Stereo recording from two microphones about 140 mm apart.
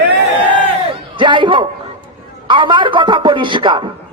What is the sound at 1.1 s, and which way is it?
A woman's voice, 35° right (ahead or behind).